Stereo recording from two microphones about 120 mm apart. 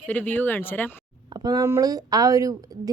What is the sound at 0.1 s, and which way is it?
Speech, 15° left (ahead or behind).